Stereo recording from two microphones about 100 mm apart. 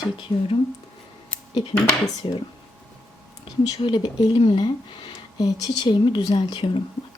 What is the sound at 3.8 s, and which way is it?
Speech, 55° left (ahead or behind).